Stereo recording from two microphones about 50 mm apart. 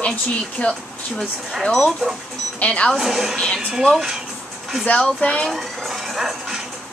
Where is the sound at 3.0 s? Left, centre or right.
Centre.